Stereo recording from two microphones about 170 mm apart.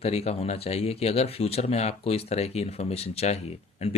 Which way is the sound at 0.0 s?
35° left (ahead or behind).